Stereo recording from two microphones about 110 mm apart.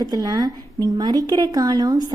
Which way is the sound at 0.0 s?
35° right (ahead or behind).